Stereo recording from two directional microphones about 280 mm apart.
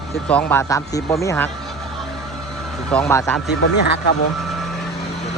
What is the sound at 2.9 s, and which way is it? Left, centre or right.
Speech, centre.